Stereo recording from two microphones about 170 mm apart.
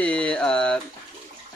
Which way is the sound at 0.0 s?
5° left (ahead or behind).